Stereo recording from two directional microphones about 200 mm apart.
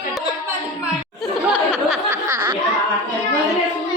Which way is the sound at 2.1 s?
15° right (ahead or behind).